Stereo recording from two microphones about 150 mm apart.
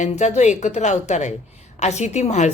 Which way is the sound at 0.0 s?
50° left (ahead or behind).